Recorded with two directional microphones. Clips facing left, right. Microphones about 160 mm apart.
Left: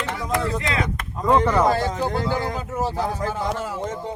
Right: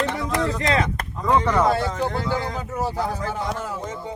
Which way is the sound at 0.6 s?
40° right (ahead or behind).